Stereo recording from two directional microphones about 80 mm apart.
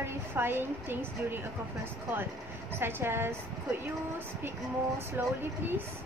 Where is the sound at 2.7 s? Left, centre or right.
Right.